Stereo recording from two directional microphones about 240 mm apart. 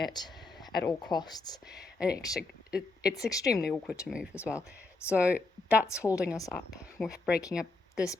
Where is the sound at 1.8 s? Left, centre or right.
Centre.